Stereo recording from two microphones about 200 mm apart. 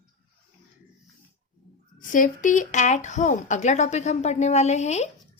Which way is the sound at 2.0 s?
40° left (ahead or behind).